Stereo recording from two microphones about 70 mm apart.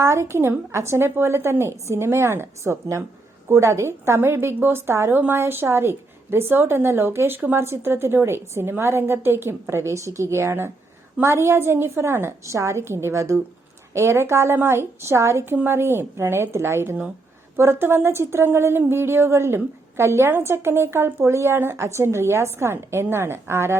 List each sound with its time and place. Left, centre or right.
0.0 s a woman's voice: right